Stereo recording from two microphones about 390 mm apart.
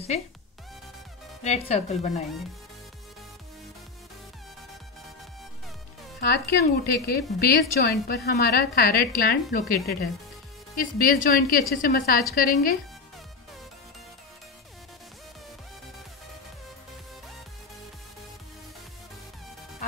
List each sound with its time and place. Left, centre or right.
1.4 s a woman's voice: centre
6.2 s a woman's voice: left
7.9 s a woman's voice: left
8.4 s a woman's voice: left
8.7 s a woman's voice: left
10.8 s a woman's voice: left